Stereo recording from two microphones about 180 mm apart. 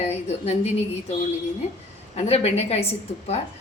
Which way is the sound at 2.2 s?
35° left (ahead or behind).